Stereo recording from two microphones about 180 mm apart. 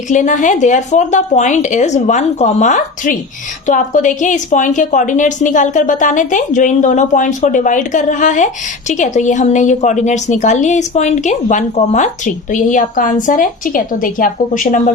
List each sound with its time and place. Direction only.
0.1 s a woman's voice: 45° left (ahead or behind)